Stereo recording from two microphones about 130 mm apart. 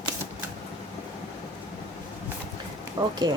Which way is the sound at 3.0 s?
40° right (ahead or behind).